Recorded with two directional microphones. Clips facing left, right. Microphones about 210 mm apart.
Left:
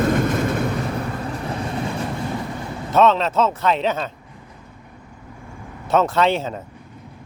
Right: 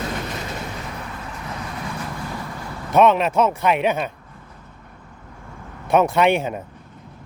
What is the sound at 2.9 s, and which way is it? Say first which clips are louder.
Speech: right 1 dB; 15° right (ahead or behind).